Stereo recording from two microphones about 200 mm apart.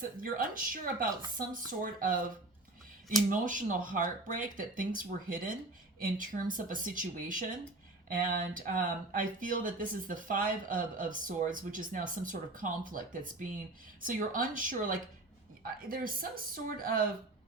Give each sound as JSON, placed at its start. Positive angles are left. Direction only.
{"t": 0.2, "sound": "speech", "side_deg": -45}
{"t": 3.2, "sound": "speech", "side_deg": -40}